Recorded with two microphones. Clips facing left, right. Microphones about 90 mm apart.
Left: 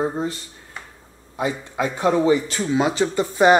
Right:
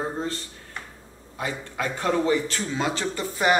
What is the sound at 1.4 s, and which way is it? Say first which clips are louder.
Speech: left 6 dB; 20° left (ahead or behind).